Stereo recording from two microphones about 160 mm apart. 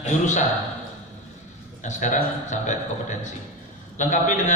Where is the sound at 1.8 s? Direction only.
50° left (ahead or behind).